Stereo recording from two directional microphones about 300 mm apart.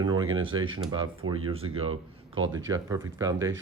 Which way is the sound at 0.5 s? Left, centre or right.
Centre.